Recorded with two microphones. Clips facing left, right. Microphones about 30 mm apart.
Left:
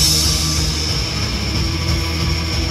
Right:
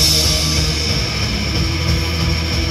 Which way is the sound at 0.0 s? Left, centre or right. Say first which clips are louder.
Right 2 dB; right.